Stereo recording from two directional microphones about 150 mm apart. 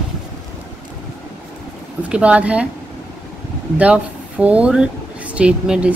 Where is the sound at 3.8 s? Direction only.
10° right (ahead or behind).